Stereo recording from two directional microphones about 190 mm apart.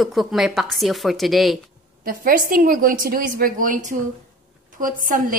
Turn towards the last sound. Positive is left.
turn(degrees=-45)  # may be behind; listen again after turning